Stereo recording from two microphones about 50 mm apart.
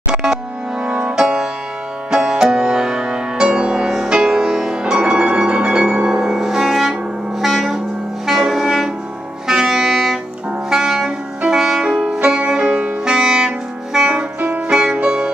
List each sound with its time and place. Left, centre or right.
0.1 s music: centre
8.3 s saxophone: centre
9.5 s music: centre
11.8 s music: centre
13.1 s music: centre
14.0 s music: right
14.7 s music: centre